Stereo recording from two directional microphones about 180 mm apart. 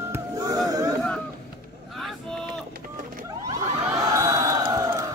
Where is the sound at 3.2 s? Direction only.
15° right (ahead or behind).